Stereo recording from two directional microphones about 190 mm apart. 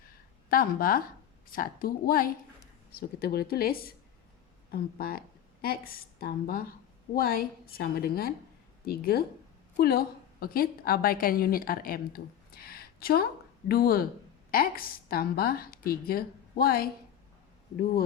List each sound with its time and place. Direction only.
0.5 s a woman's voice: 50° left (ahead or behind)